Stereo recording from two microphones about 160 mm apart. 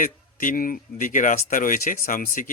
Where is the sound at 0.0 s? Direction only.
55° left (ahead or behind).